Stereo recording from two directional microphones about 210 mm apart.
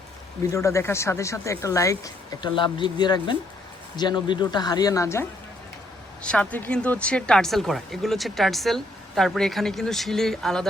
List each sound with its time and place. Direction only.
0.5 s speech: 15° left (ahead or behind)
6.2 s speech: 5° left (ahead or behind)